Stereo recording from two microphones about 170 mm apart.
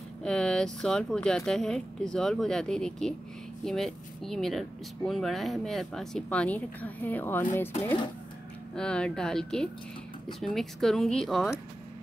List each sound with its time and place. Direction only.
0.2 s a sound: 5° left (ahead or behind)
0.7 s speech: 5° left (ahead or behind)
8.7 s speech: 5° left (ahead or behind)